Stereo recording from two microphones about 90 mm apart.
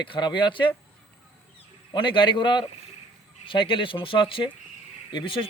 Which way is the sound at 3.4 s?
70° left (ahead or behind).